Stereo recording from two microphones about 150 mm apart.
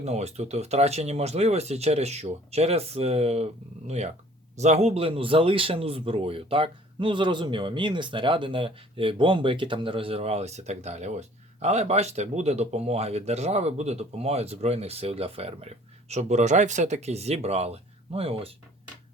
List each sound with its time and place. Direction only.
0.0 s speech: 45° right (ahead or behind)